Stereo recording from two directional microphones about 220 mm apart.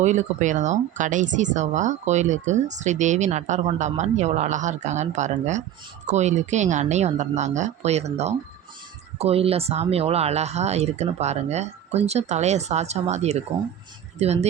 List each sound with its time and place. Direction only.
0.0 s speech: 35° right (ahead or behind)